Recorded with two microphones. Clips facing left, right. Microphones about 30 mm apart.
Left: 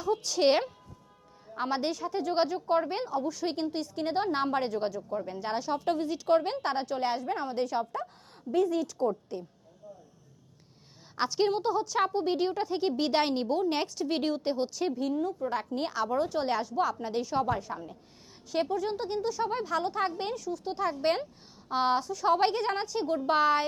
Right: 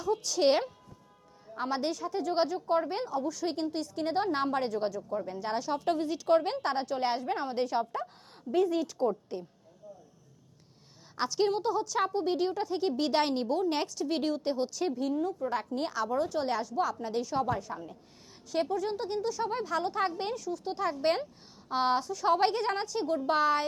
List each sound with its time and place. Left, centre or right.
0.0 s a woman's voice: left
4.9 s a woman's voice: centre
5.2 s a woman's voice: left
5.6 s a woman's voice: centre
7.2 s a woman's voice: right
7.4 s speech: centre
11.1 s a woman's voice: left
12.9 s a woman's voice: centre
15.9 s a woman's voice: left
16.8 s a woman's voice: left
19.7 s a woman's voice: centre; by 23.6 s left